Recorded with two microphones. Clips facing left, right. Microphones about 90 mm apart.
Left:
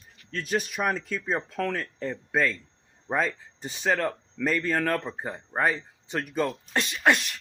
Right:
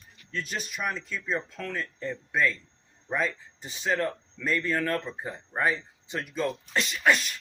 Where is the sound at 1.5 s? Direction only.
80° left.